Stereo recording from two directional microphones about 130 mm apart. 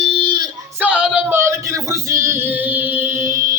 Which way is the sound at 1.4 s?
25° right (ahead or behind).